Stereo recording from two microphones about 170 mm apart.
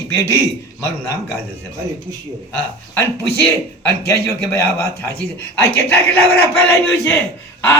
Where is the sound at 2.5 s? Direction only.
10° left (ahead or behind).